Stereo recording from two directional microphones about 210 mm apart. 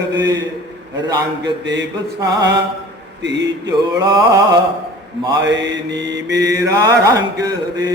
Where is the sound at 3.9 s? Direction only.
20° right (ahead or behind).